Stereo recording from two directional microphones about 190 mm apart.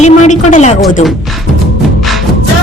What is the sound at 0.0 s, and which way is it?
Speech, 40° left (ahead or behind).